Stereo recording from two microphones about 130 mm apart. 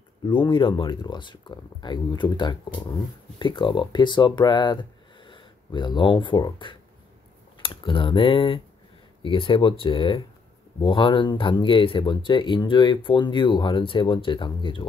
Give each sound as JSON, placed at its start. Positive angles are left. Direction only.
{"t": 0.2, "sound": "speech", "side_deg": 40}